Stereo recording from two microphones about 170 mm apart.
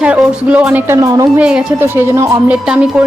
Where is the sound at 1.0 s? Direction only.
20° right (ahead or behind).